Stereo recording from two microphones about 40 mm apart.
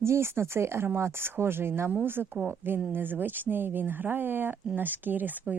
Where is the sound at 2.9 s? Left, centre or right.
Right.